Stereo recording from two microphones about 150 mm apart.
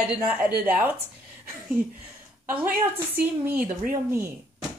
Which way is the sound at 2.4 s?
15° right (ahead or behind).